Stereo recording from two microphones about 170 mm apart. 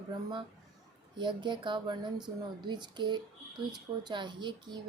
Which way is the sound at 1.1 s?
25° right (ahead or behind).